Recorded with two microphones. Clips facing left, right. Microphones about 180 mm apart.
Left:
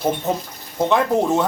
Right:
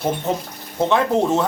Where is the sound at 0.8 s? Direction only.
10° left (ahead or behind).